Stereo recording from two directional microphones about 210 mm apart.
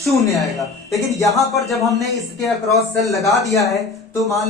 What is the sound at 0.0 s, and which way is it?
Speech, centre (ahead or behind).